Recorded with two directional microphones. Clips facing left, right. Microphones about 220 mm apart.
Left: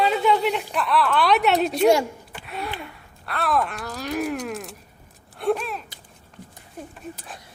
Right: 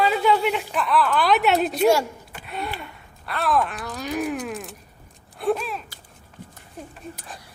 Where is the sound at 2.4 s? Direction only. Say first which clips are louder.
Right 1 dB; centre (ahead or behind).